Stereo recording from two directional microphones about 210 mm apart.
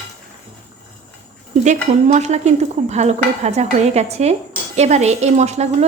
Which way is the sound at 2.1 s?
35° right (ahead or behind).